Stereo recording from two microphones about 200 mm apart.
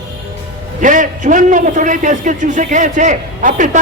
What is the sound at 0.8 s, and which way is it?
A man's voice, 40° right (ahead or behind).